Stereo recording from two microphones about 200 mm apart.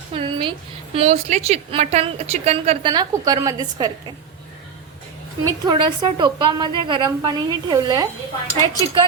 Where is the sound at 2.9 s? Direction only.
20° right (ahead or behind).